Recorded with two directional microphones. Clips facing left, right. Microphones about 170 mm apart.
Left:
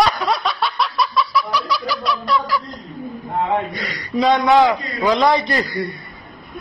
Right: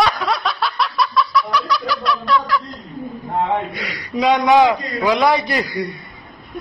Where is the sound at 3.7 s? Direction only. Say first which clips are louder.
Left 2 dB; 10° right (ahead or behind).